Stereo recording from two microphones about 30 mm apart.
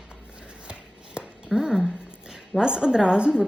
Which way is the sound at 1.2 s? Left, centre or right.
Right.